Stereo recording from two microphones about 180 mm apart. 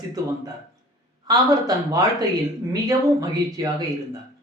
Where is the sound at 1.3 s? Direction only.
20° right (ahead or behind).